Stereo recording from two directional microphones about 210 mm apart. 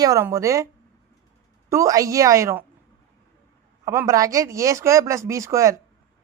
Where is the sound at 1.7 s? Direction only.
15° right (ahead or behind).